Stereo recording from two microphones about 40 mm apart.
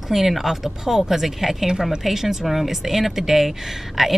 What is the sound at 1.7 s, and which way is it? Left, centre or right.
A woman's voice, centre.